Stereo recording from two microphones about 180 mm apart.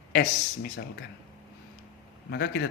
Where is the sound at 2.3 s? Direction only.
65° left (ahead or behind).